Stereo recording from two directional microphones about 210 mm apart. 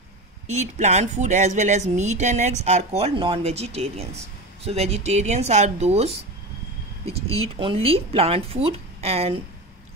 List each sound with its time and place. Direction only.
0.5 s a woman's voice: 35° right (ahead or behind)
7.4 s a woman's voice: 25° right (ahead or behind)